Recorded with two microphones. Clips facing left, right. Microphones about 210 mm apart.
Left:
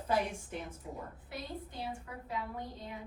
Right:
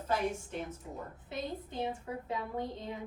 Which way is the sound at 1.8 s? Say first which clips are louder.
Right 10 dB; 20° right (ahead or behind).